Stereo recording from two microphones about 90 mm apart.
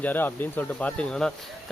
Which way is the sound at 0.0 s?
20° left (ahead or behind).